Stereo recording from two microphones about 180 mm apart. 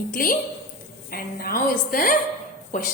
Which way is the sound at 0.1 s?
50° left (ahead or behind).